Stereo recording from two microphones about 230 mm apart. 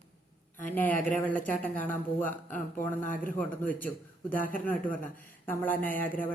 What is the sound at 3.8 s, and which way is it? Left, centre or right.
A woman's voice, centre.